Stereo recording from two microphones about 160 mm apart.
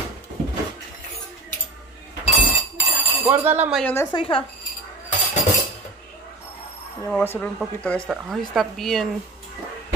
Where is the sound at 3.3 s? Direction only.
10° right (ahead or behind).